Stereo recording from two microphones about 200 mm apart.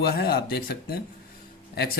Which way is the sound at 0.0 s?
50° left (ahead or behind).